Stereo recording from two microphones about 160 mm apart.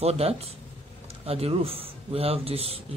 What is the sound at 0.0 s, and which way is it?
Speech, 40° right (ahead or behind).